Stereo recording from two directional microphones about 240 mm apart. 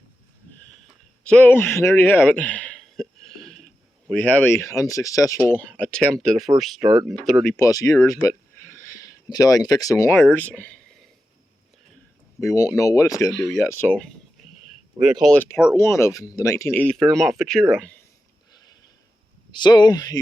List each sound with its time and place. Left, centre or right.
1.2 s a sound: centre
4.1 s speech: centre
7.4 s speech: centre
10.3 s a sound: centre
12.4 s speech: centre
19.5 s speech: centre